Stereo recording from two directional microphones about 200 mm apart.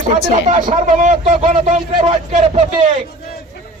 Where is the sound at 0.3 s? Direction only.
40° right (ahead or behind).